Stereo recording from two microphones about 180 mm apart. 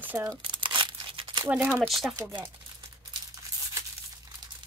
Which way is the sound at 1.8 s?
Centre (ahead or behind).